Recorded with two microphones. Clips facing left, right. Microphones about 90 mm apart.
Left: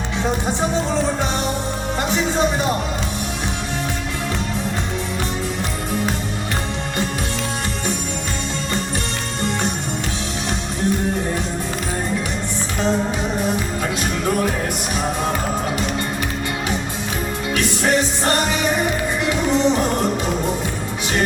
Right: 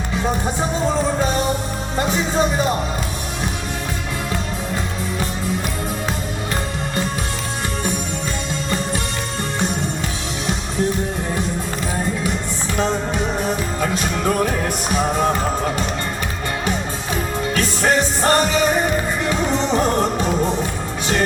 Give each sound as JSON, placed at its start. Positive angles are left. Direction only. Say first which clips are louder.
{"t": 17.5, "sound": "music", "louder": "even", "side_deg": -35}